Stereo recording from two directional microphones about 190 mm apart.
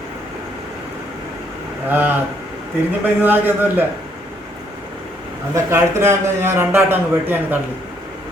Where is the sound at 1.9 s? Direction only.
10° right (ahead or behind).